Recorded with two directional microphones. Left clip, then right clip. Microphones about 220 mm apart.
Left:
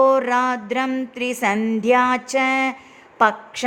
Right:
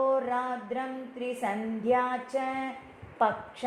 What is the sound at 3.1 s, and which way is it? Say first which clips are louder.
Speech: left 10 dB; 30° left (ahead or behind).